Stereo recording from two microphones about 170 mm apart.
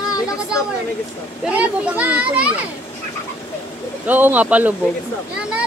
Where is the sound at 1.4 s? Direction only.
10° right (ahead or behind).